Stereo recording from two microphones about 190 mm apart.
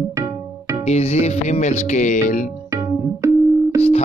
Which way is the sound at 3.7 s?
30° left (ahead or behind).